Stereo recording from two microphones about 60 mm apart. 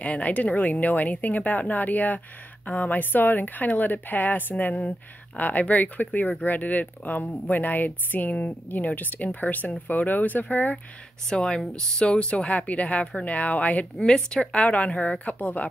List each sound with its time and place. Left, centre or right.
0.0 s speech: left
11.2 s speech: centre
13.9 s speech: centre